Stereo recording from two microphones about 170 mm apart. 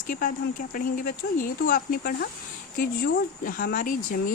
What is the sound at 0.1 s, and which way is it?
Speech, 55° left (ahead or behind).